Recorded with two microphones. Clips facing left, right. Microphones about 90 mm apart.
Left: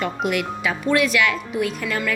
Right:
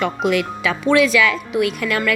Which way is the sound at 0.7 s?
90° right.